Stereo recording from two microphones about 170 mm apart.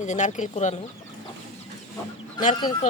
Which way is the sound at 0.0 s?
45° left (ahead or behind).